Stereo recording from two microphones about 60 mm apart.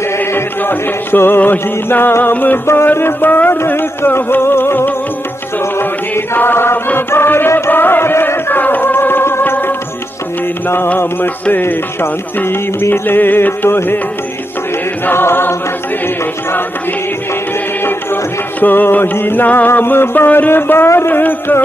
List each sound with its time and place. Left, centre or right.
0.2 s music: left
2.6 s music: left
5.8 s chant: left
6.9 s music: left
11.6 s music: left
15.0 s music: left
17.8 s music: left